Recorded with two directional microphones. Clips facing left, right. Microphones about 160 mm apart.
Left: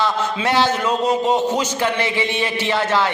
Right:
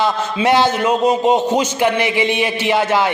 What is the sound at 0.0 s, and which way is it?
A man's voice, 15° right (ahead or behind).